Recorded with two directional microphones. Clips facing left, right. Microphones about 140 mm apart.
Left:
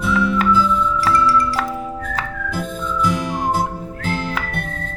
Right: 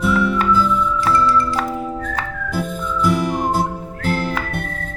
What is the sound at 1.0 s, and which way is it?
Music, 20° right (ahead or behind).